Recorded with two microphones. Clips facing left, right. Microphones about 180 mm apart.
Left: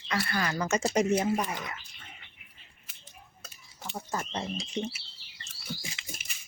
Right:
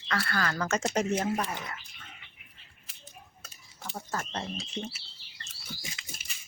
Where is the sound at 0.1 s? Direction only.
15° left (ahead or behind).